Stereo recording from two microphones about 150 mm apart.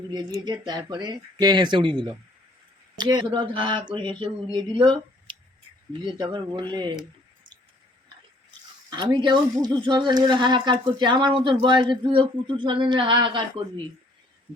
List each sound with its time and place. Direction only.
0.1 s speech: 30° right (ahead or behind)
8.9 s speech: 30° right (ahead or behind)